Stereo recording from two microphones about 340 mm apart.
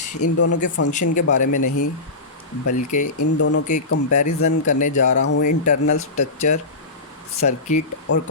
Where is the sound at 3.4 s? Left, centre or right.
Left.